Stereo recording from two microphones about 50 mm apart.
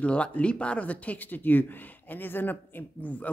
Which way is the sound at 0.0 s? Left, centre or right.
Left.